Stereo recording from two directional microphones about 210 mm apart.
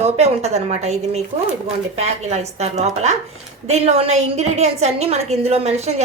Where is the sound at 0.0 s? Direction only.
30° right (ahead or behind).